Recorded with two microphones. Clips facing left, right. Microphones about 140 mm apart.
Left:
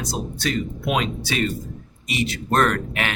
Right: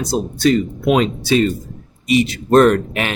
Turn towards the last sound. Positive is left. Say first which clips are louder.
# right 8 dB
turn(degrees=-25)  # may be behind; listen again after turning